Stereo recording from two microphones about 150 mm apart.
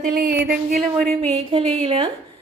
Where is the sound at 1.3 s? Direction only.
40° right (ahead or behind).